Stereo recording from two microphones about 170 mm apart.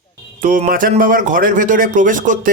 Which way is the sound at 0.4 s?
50° right (ahead or behind).